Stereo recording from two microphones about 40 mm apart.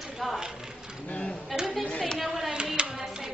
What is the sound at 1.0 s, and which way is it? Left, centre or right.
Speech, left.